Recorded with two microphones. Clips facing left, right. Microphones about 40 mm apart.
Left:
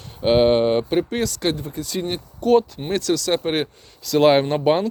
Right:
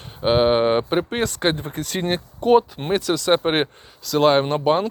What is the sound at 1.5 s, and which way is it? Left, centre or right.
Speech, right.